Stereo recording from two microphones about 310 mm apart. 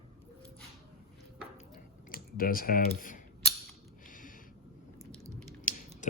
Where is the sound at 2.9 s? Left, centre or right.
Left.